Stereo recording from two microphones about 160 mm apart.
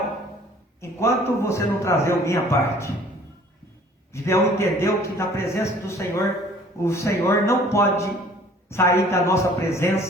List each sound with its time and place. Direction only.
0.8 s a man's voice: 15° left (ahead or behind)
4.1 s a man's voice: 15° left (ahead or behind)